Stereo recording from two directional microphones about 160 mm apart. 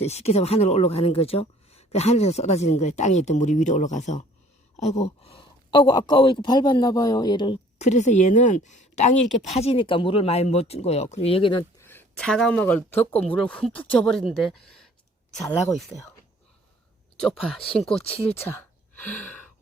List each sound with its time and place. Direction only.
0.0 s speech: 40° left (ahead or behind)
7.8 s speech: 45° left (ahead or behind)
11.8 s speech: 15° left (ahead or behind)
15.9 s speech: 15° left (ahead or behind)
17.2 s speech: 5° left (ahead or behind)
18.3 s a woman's voice: 15° left (ahead or behind)